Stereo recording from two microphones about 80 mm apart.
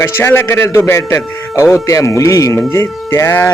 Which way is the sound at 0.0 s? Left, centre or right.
Left.